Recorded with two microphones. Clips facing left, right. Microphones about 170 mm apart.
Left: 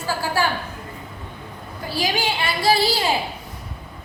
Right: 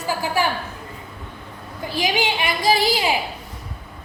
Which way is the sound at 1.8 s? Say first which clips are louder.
Right 1 dB; 20° right (ahead or behind).